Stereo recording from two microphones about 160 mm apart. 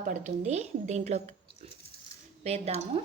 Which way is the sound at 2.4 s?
40° right (ahead or behind).